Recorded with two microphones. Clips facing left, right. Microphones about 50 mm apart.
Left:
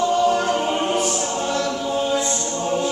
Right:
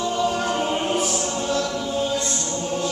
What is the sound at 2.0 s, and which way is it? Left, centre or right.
Choir, centre.